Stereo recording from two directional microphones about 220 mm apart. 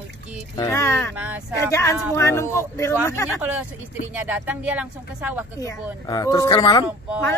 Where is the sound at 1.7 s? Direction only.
10° left (ahead or behind).